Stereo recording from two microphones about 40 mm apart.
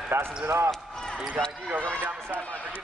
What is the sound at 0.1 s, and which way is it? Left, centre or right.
Speech, right.